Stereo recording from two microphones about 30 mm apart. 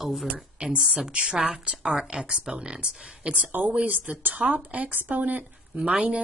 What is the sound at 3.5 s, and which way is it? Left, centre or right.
Speech, right.